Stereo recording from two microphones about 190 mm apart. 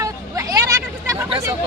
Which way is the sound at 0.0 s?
15° right (ahead or behind).